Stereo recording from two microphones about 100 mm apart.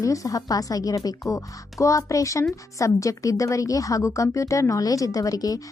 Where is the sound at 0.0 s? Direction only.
35° left (ahead or behind).